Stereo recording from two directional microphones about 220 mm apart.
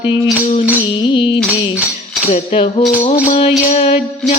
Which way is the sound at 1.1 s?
20° left (ahead or behind).